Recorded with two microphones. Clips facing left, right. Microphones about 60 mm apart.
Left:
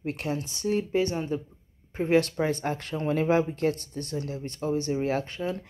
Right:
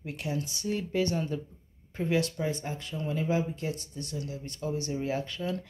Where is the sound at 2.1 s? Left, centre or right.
Left.